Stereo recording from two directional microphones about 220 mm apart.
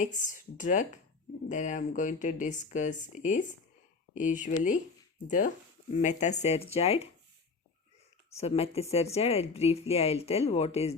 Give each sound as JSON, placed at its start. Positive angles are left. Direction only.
{"t": 0.0, "sound": "speech", "side_deg": 35}
{"t": 5.9, "sound": "speech", "side_deg": 35}
{"t": 8.4, "sound": "speech", "side_deg": 30}